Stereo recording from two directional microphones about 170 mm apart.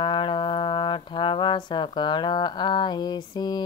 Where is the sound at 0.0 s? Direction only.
30° left (ahead or behind).